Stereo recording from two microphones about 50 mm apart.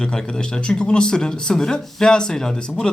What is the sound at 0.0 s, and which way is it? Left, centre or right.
Speech, centre.